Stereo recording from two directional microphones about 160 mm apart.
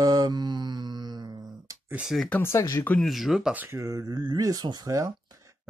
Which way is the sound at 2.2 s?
10° left (ahead or behind).